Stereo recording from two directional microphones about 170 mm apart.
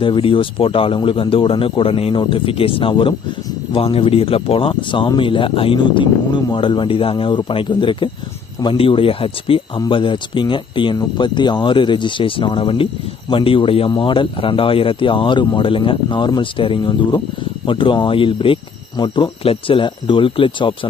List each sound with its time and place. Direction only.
0.0 s speech: 30° left (ahead or behind)